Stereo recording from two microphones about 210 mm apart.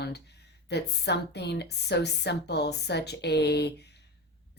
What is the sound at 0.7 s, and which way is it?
A woman's voice, 55° left (ahead or behind).